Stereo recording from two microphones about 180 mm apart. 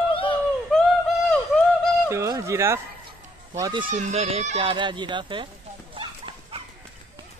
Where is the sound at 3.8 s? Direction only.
45° right (ahead or behind); by 5.4 s 25° right (ahead or behind).